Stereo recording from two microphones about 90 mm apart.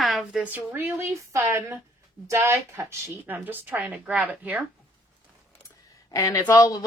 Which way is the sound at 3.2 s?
20° right (ahead or behind).